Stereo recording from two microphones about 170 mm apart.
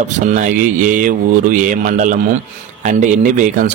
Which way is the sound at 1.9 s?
45° right (ahead or behind).